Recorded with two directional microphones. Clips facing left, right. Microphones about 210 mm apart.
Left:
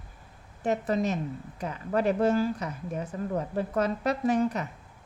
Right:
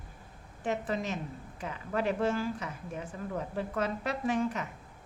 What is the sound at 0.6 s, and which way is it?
Speech, 40° left (ahead or behind).